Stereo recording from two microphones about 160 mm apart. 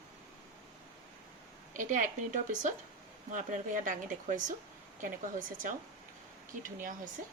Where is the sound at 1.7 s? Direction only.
55° right (ahead or behind).